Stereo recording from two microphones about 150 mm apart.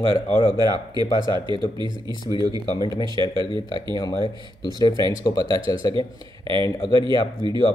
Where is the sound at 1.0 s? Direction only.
30° left (ahead or behind).